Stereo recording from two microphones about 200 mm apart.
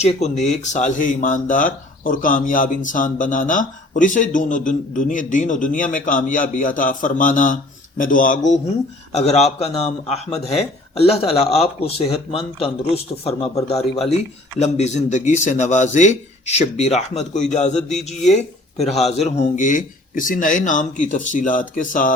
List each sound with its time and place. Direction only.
0.0 s speech: 35° left (ahead or behind)
9.1 s speech: 30° left (ahead or behind)